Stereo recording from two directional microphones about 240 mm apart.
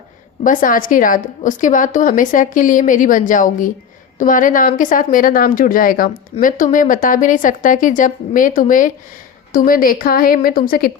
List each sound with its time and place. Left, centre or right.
0.4 s a woman's voice: left